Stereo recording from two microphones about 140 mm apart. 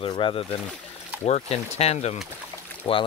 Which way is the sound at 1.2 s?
50° left (ahead or behind).